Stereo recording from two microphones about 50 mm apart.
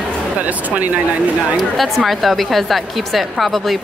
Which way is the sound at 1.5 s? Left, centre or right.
Centre.